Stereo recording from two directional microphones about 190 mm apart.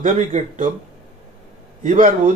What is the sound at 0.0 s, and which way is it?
Speech, 45° right (ahead or behind).